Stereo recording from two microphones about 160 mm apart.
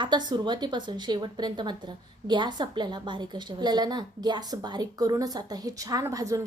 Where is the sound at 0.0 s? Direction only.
25° right (ahead or behind).